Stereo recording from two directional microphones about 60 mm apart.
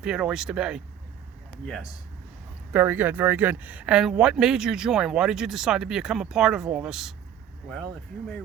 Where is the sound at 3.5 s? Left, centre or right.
Centre.